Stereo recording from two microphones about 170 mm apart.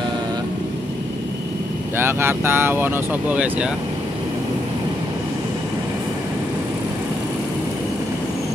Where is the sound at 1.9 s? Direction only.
15° right (ahead or behind).